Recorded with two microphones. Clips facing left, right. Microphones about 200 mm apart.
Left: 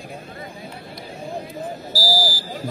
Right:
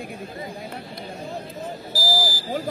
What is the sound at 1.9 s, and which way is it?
Buzzer, 20° right (ahead or behind).